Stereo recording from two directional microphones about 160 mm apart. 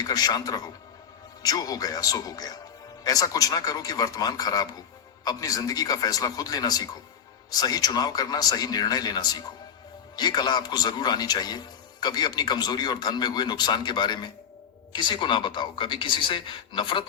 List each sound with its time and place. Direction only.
0.0 s a man's voice: 25° left (ahead or behind)